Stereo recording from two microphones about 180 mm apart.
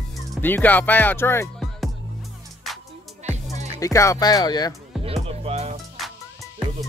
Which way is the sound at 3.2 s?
40° right (ahead or behind).